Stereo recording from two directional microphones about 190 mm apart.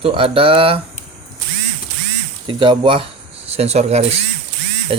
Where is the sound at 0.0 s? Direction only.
30° right (ahead or behind).